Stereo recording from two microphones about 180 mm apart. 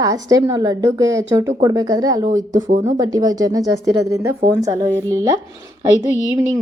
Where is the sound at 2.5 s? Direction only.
45° right (ahead or behind).